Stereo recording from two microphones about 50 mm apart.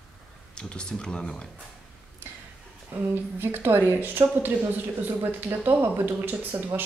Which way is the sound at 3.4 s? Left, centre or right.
Right.